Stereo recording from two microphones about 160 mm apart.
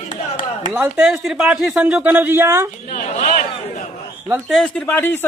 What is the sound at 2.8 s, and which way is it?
Speech, 50° left (ahead or behind).